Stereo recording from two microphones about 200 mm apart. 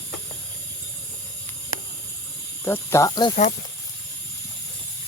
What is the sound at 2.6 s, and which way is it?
Speech, 10° left (ahead or behind).